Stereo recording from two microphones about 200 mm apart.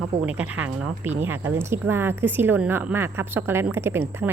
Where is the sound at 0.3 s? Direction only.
5° right (ahead or behind).